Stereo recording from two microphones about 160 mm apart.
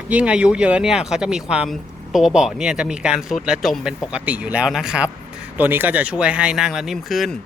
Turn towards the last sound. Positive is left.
turn(degrees=0)  # may be behind; listen again after turning